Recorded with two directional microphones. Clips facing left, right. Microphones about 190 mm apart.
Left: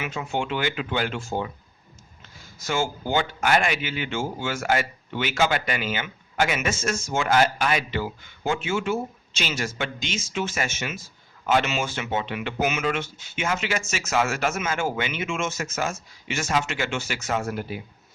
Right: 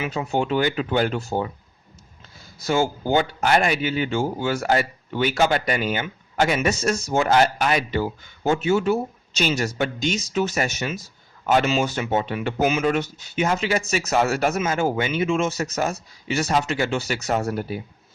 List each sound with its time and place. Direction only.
0.0 s speech: 35° right (ahead or behind)
2.6 s speech: 35° right (ahead or behind)